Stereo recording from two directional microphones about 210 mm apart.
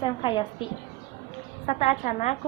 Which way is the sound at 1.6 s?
30° left (ahead or behind).